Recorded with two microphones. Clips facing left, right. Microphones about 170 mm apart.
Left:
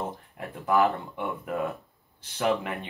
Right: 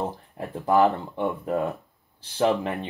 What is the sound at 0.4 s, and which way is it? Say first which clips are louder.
Speech: right 4 dB; 35° right (ahead or behind).